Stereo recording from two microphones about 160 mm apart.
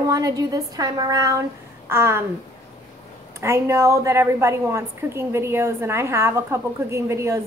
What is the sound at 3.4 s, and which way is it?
A woman's voice, 15° right (ahead or behind).